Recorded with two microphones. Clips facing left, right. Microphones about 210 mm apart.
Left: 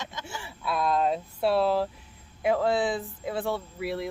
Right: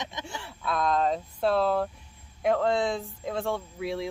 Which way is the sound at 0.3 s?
5° left (ahead or behind).